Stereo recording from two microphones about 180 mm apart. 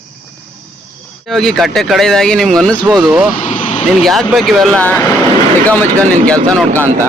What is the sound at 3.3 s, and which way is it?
Vehicle, 40° left (ahead or behind).